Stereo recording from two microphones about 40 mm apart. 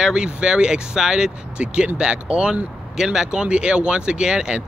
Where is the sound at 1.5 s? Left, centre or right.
Right.